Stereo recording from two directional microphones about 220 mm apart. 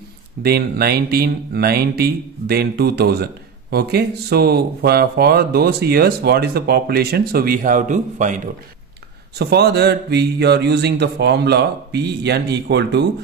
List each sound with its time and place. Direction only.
0.4 s speech: 45° right (ahead or behind)
9.4 s speech: 50° right (ahead or behind)